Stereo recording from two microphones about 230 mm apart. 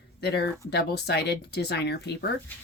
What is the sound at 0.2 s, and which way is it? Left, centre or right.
Speech, left.